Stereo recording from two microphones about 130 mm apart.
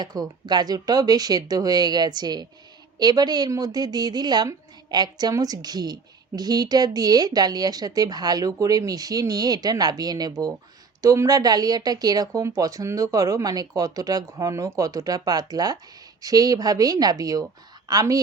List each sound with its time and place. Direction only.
0.0 s a woman's voice: 30° right (ahead or behind)